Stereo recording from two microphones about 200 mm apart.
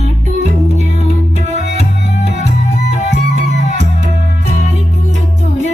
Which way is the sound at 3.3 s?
35° right (ahead or behind).